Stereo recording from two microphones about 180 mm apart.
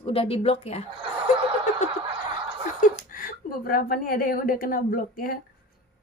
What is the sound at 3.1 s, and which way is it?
A woman's voice, 50° left (ahead or behind).